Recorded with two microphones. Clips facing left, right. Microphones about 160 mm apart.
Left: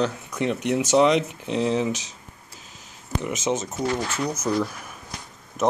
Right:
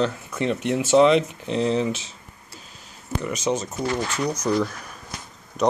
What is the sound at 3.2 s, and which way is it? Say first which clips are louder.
Speech: right 1 dB; 20° left (ahead or behind).